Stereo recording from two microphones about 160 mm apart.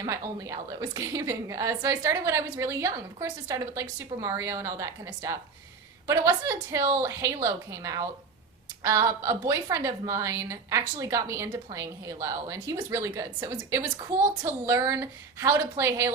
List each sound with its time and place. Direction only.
0.0 s a woman's voice: 20° right (ahead or behind)